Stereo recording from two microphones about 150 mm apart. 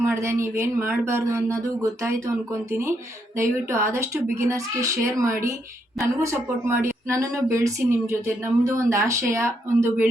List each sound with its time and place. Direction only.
0.0 s speech: 15° right (ahead or behind)
3.3 s speech: 15° right (ahead or behind)